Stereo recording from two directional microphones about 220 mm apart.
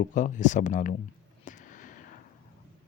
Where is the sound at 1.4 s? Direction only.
35° left (ahead or behind).